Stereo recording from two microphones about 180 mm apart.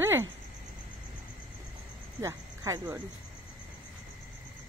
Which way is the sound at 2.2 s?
20° right (ahead or behind).